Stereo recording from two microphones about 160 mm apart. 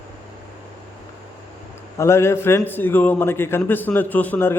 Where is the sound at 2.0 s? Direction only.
15° left (ahead or behind).